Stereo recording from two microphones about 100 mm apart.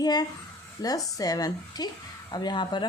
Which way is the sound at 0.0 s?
40° left (ahead or behind).